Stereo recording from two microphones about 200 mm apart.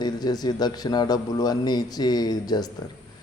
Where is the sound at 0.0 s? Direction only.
20° left (ahead or behind).